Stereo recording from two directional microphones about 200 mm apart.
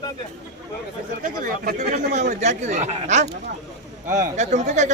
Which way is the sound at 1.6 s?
35° right (ahead or behind).